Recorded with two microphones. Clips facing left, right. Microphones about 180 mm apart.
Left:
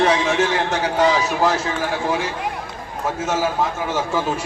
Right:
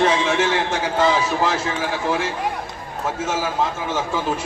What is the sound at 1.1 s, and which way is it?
Speech, 10° left (ahead or behind).